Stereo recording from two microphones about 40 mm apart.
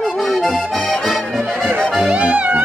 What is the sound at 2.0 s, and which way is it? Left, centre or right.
Music, right.